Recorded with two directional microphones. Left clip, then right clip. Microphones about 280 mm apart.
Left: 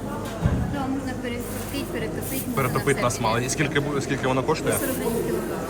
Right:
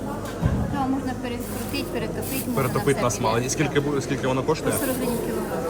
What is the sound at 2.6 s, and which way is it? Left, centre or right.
Speech, centre.